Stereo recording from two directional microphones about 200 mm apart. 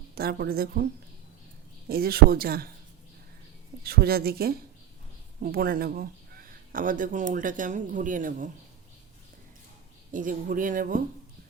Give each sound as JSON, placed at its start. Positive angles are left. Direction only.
{"t": 0.1, "sound": "speech", "side_deg": -50}
{"t": 1.9, "sound": "speech", "side_deg": -50}
{"t": 3.8, "sound": "speech", "side_deg": -50}
{"t": 10.1, "sound": "speech", "side_deg": -40}